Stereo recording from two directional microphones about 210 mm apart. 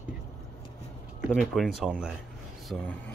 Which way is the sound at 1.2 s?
Centre (ahead or behind).